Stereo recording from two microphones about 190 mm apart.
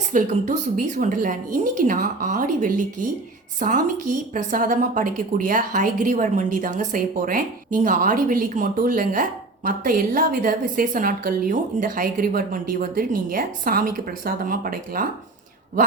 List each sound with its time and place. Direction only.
0.1 s a woman's voice: 45° right (ahead or behind)